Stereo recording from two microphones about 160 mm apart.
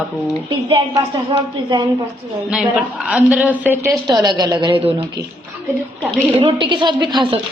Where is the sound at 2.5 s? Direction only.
5° right (ahead or behind).